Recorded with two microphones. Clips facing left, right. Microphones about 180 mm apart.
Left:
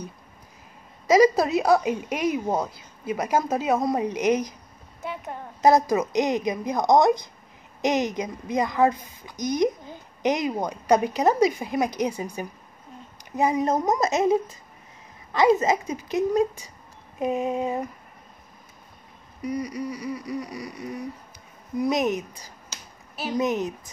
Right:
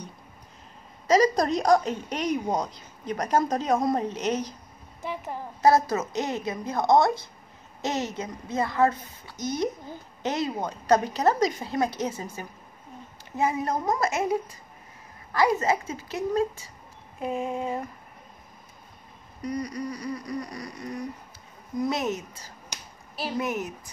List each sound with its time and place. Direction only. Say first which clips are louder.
1.0 s a woman's voice: left 3 dB; 10° left (ahead or behind)
5.0 s a woman's voice: even; centre (ahead or behind)
5.6 s a woman's voice: left 2 dB; 15° left (ahead or behind)
19.4 s a woman's voice: left 2 dB; 10° left (ahead or behind)